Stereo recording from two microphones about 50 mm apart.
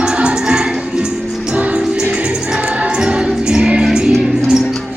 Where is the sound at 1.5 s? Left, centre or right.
Right.